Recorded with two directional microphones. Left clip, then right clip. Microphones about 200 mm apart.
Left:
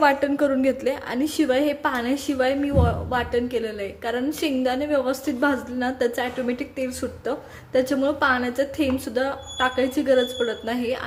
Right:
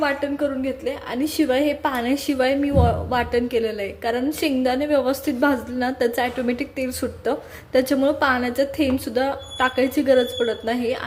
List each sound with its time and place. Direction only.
0.0 s a woman's voice: 20° left (ahead or behind)
1.1 s a woman's voice: centre (ahead or behind)